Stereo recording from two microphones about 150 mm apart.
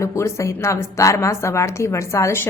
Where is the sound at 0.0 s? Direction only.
20° left (ahead or behind).